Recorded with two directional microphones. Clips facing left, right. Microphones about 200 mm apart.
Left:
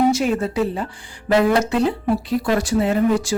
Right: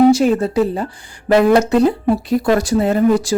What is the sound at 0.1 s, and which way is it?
A woman's voice, 35° right (ahead or behind).